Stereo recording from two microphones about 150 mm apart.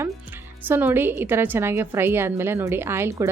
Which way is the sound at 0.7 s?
15° right (ahead or behind).